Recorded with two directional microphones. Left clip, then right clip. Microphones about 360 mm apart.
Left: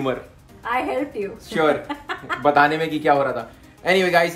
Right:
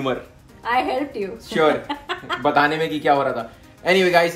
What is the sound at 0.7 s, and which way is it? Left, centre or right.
Speech, centre.